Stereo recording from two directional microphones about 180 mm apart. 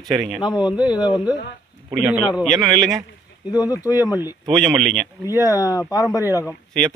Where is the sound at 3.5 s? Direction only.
20° left (ahead or behind).